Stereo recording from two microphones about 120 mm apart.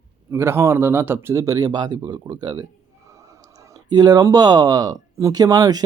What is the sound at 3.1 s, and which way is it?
Clicking, 25° right (ahead or behind).